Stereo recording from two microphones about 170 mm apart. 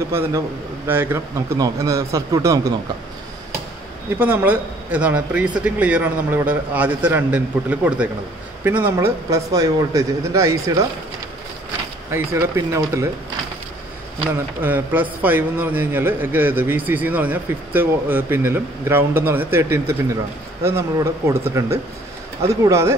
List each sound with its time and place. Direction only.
0.1 s a man's voice: 15° right (ahead or behind)
4.2 s a man's voice: 10° right (ahead or behind)
12.1 s a man's voice: 15° right (ahead or behind)
14.3 s a man's voice: 10° right (ahead or behind)